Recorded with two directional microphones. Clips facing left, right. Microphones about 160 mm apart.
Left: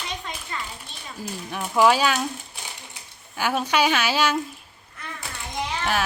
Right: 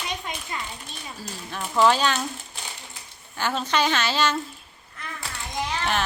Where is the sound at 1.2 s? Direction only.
5° left (ahead or behind).